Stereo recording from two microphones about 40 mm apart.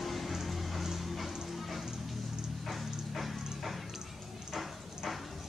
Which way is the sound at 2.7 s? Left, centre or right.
Centre.